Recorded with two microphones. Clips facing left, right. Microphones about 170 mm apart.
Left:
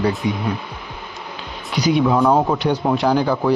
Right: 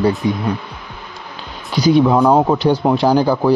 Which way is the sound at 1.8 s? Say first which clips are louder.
Right 4 dB; 30° right (ahead or behind).